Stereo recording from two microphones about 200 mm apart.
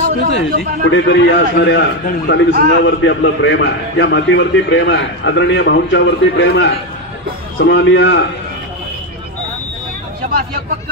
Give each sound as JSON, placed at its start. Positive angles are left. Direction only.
{"t": 0.3, "sound": "a man's voice", "side_deg": 65}